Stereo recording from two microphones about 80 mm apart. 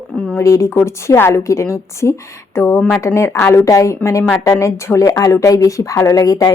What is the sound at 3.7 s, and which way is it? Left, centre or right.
A woman's voice, left.